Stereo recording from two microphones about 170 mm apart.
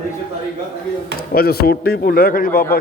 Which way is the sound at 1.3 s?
65° left (ahead or behind).